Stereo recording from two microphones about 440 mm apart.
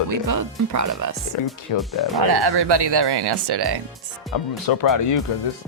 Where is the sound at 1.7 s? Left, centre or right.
Left.